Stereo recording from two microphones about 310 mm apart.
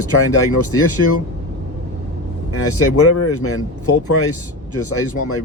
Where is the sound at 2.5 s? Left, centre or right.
Left.